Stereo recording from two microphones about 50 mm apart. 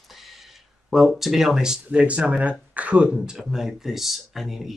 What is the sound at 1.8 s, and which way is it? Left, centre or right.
Speech, right.